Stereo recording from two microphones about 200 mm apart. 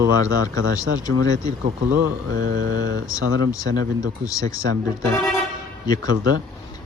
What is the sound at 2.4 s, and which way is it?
Mantra, 55° right (ahead or behind).